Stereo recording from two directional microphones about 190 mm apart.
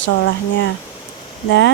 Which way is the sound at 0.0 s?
75° left (ahead or behind).